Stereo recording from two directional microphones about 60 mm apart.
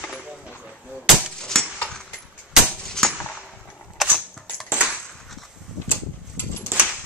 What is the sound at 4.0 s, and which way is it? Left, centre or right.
Camera, centre.